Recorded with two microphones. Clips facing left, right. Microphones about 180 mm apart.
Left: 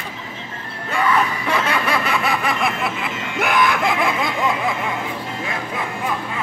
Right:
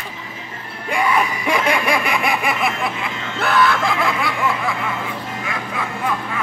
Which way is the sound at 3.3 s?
15° left (ahead or behind).